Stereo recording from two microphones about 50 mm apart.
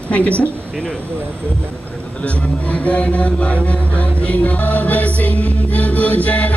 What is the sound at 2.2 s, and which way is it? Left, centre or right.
Speech, left.